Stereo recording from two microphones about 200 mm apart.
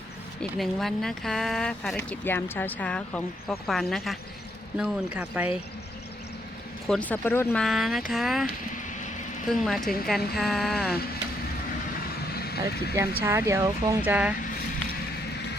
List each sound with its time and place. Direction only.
0.6 s speech: centre (ahead or behind)
6.8 s speech: 5° left (ahead or behind)
9.5 s speech: centre (ahead or behind)
12.3 s vehicle: 50° left (ahead or behind)
13.0 s speech: 15° right (ahead or behind)